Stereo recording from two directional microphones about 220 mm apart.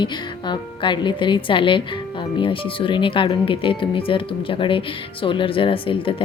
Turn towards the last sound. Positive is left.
turn(degrees=25)  # may be behind; listen again after turning